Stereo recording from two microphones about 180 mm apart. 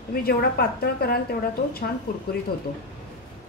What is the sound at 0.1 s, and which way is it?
A woman's voice, 60° left (ahead or behind).